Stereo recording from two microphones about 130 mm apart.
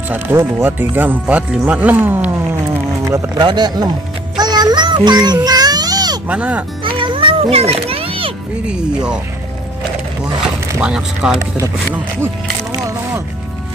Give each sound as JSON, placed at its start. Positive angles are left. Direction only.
{"t": 0.1, "sound": "speech", "side_deg": -15}
{"t": 3.3, "sound": "speech", "side_deg": -35}
{"t": 4.4, "sound": "a sound", "side_deg": -30}
{"t": 6.2, "sound": "speech", "side_deg": -10}
{"t": 6.8, "sound": "music", "side_deg": -40}
{"t": 8.6, "sound": "speech", "side_deg": -5}
{"t": 10.8, "sound": "speech", "side_deg": -5}
{"t": 12.7, "sound": "a sound", "side_deg": -25}